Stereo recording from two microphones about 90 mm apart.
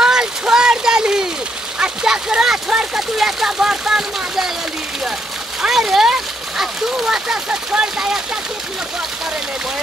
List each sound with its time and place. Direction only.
0.0 s a sound: 5° right (ahead or behind)
1.8 s speech: 10° right (ahead or behind)
5.6 s speech: 5° right (ahead or behind)